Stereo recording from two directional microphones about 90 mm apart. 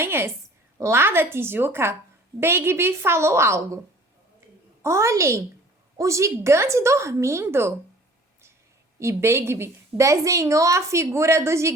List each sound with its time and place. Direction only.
0.0 s a woman's voice: 25° right (ahead or behind)
4.8 s a woman's voice: 30° right (ahead or behind)
9.0 s a woman's voice: 30° right (ahead or behind)